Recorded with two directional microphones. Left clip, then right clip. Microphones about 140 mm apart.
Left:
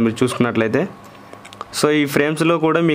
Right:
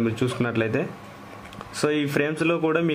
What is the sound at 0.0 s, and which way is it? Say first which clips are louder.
A man's voice: left 7 dB; 40° left (ahead or behind).